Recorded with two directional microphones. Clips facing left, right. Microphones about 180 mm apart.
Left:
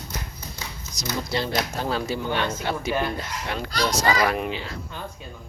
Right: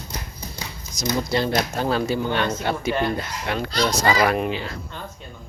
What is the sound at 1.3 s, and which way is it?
Speech, 50° right (ahead or behind).